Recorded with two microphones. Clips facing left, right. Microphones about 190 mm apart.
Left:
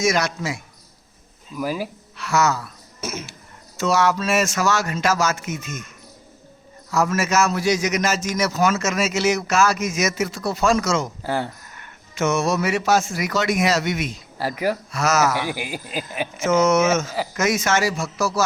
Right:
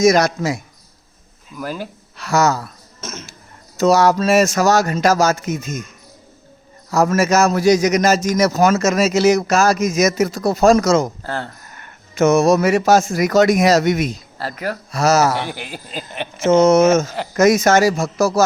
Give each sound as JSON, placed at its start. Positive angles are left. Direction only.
{"t": 0.0, "sound": "a man's voice", "side_deg": -40}
{"t": 1.5, "sound": "a sound", "side_deg": 5}
{"t": 2.1, "sound": "speech", "side_deg": -40}
{"t": 3.0, "sound": "speech", "side_deg": 10}
{"t": 3.8, "sound": "a man's voice", "side_deg": -40}
{"t": 6.9, "sound": "a man's voice", "side_deg": -40}
{"t": 11.2, "sound": "a sound", "side_deg": 10}
{"t": 11.7, "sound": "speech", "side_deg": -45}
{"t": 14.3, "sound": "a sound", "side_deg": 10}
{"t": 14.9, "sound": "a man's voice", "side_deg": -35}
{"t": 15.5, "sound": "a sound", "side_deg": 10}
{"t": 16.4, "sound": "a man's voice", "side_deg": -30}